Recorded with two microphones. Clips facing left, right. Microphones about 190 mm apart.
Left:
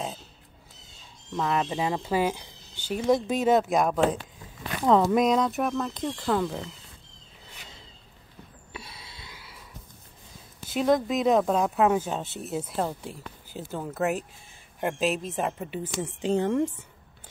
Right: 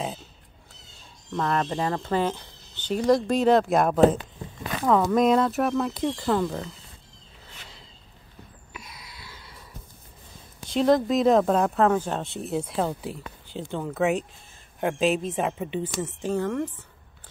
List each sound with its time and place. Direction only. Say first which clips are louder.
1.3 s speech: right 1 dB; 5° left (ahead or behind)
5.1 s speech: right 2 dB; centre (ahead or behind)
8.7 s a sound: left 1 dB; 30° left (ahead or behind)
9.3 s a sound: right 1 dB; 5° left (ahead or behind)
10.6 s speech: right 3 dB; 5° left (ahead or behind)
11.7 s speech: right 1 dB; 10° left (ahead or behind)
16.0 s a woman's voice: left 3 dB; 15° left (ahead or behind)